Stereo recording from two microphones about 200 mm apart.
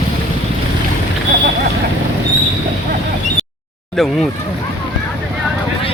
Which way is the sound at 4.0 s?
Centre (ahead or behind).